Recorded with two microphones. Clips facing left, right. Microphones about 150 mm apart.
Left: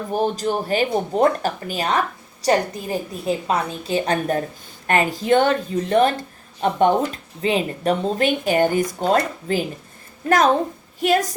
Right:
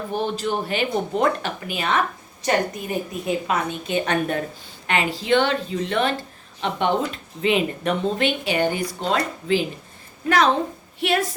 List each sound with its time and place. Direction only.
0.1 s speech: 40° left (ahead or behind)